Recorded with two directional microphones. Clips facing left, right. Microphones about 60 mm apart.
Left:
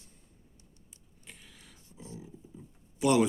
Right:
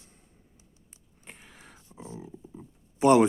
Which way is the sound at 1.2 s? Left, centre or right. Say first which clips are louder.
Right 4 dB; right.